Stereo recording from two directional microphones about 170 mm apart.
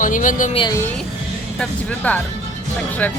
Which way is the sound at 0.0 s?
50° left (ahead or behind).